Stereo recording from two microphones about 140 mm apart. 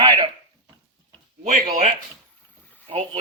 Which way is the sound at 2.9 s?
40° right (ahead or behind).